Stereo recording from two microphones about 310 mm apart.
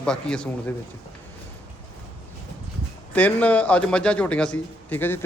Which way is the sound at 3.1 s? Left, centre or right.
Centre.